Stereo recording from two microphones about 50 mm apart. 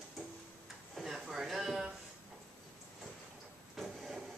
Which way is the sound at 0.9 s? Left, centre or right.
Centre.